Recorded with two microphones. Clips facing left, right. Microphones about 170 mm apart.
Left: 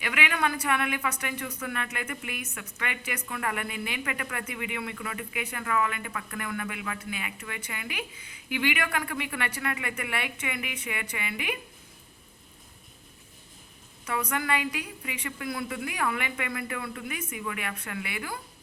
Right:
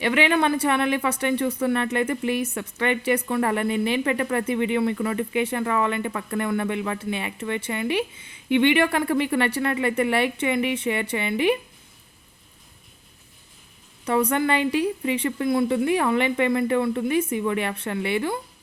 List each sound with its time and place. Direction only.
0.0 s speech: 30° right (ahead or behind)
14.0 s speech: 30° right (ahead or behind)